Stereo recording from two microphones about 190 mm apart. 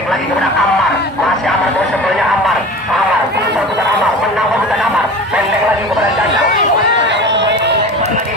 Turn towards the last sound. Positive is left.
turn(degrees=-65)  # may be behind; listen again after turning